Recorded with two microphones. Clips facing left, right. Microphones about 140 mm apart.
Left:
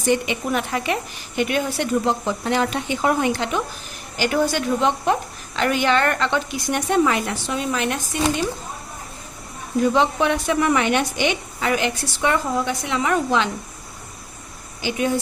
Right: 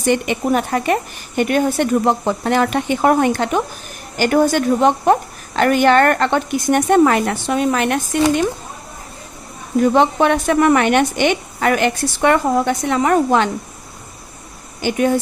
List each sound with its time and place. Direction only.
0.0 s a woman's voice: 65° right (ahead or behind)
0.4 s a woman's voice: 45° right (ahead or behind)
9.8 s a woman's voice: 55° right (ahead or behind)
14.8 s a woman's voice: 50° right (ahead or behind)